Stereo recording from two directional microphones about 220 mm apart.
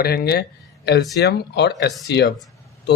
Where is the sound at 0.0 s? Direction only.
45° left (ahead or behind).